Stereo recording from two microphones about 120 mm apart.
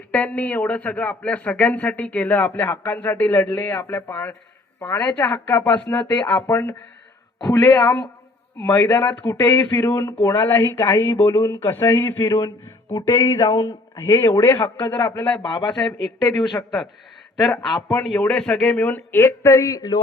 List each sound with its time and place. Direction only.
0.1 s a man's voice: 10° left (ahead or behind)
7.3 s speech: 35° left (ahead or behind); by 15.4 s 15° left (ahead or behind)
15.4 s speech: 40° left (ahead or behind)
15.7 s a man's voice: 5° left (ahead or behind)
17.4 s a man's voice: centre (ahead or behind); by 20.0 s 30° left (ahead or behind)